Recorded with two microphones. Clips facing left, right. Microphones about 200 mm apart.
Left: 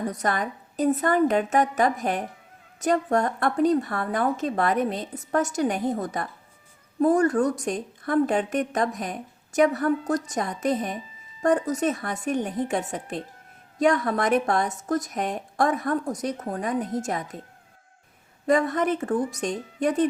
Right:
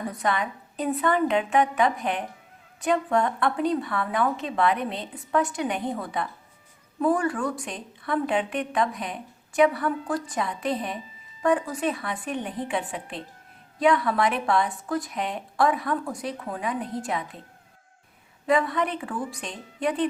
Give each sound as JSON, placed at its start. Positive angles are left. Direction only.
{"t": 0.1, "sound": "a woman's voice", "side_deg": 45}
{"t": 18.4, "sound": "a woman's voice", "side_deg": 45}